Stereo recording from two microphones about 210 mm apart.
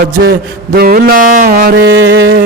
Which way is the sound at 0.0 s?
45° right (ahead or behind).